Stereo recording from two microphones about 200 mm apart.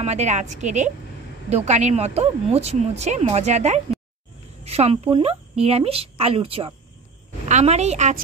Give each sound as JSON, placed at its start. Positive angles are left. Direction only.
{"t": 0.0, "sound": "speech", "side_deg": -35}